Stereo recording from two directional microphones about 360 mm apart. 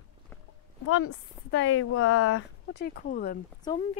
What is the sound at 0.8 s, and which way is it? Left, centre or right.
Speech, left.